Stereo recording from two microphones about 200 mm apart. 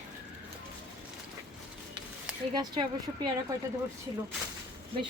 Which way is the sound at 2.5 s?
20° right (ahead or behind).